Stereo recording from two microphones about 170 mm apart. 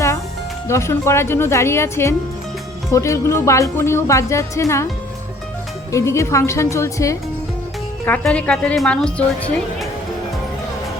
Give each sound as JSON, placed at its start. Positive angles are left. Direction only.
{"t": 0.7, "sound": "a woman's voice", "side_deg": 15}
{"t": 5.9, "sound": "a woman's voice", "side_deg": 15}